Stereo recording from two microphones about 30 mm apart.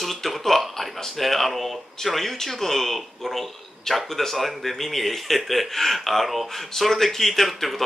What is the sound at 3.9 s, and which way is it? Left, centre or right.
Speech, centre.